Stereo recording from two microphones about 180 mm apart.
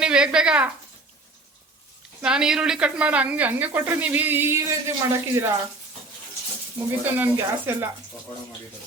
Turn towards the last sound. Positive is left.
turn(degrees=-10)  # may be behind; listen again after turning